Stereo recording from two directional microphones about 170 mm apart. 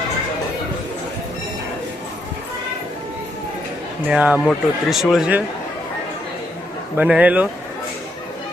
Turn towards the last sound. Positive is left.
turn(degrees=-10)  # may be behind; listen again after turning